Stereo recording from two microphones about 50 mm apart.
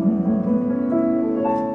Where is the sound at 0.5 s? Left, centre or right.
Centre.